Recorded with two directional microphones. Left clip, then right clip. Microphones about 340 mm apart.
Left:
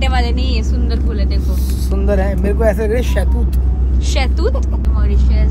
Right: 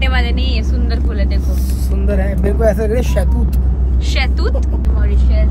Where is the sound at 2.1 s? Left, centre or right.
Left.